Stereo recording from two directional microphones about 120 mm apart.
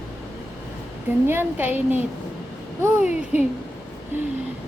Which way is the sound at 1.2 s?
15° right (ahead or behind).